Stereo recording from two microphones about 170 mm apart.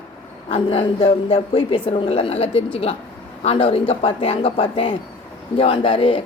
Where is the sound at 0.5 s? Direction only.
35° left (ahead or behind).